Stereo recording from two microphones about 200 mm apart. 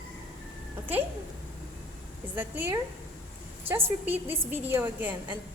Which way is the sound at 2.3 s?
10° right (ahead or behind).